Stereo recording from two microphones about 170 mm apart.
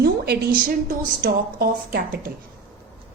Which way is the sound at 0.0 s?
65° right (ahead or behind).